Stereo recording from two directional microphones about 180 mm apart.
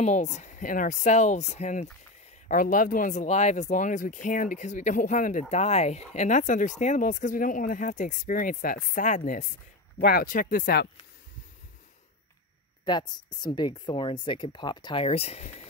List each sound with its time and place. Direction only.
0.0 s speech: 40° left (ahead or behind)
2.4 s speech: 50° left (ahead or behind)
9.9 s speech: 55° left (ahead or behind)
12.8 s speech: 25° left (ahead or behind)